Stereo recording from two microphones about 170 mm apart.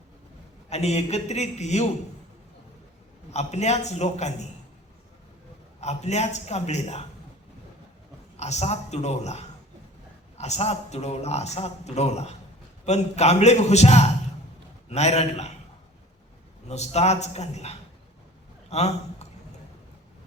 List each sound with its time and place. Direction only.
0.7 s a man's voice: 40° left (ahead or behind)
3.3 s a man's voice: 40° left (ahead or behind)
5.8 s a man's voice: 40° left (ahead or behind)
8.4 s a man's voice: 40° left (ahead or behind)
16.6 s a man's voice: 40° left (ahead or behind)